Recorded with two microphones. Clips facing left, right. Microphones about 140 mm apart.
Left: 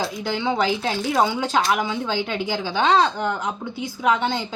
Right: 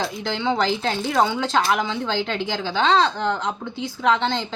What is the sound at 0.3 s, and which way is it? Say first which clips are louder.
A woman's voice: even; 10° left (ahead or behind).